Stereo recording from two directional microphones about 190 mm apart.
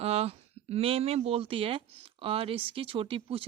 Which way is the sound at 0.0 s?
35° right (ahead or behind).